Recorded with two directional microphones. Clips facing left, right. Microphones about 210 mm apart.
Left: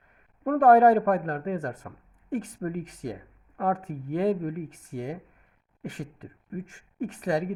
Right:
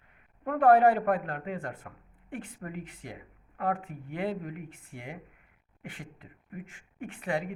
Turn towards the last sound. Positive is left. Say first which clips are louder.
# left 5 dB
turn(degrees=40)  # may be behind; listen again after turning